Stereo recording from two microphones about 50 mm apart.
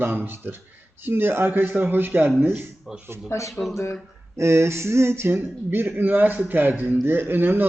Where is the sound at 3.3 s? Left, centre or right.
Left.